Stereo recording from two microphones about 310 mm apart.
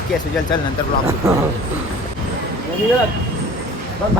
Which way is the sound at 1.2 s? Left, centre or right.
Centre.